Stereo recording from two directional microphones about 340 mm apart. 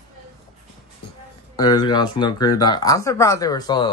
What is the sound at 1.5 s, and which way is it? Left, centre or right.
Speech, centre.